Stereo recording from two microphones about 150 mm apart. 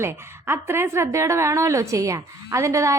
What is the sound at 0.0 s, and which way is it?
A woman's voice, 15° right (ahead or behind).